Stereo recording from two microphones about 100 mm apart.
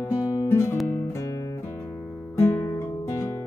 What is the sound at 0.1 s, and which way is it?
Music, 30° left (ahead or behind).